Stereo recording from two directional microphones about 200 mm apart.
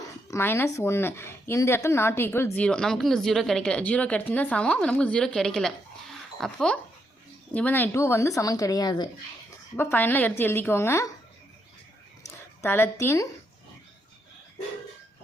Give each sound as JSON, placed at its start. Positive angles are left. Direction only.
{"t": 0.3, "sound": "a woman's voice", "side_deg": 15}
{"t": 9.7, "sound": "a woman's voice", "side_deg": 10}
{"t": 12.6, "sound": "a woman's voice", "side_deg": 10}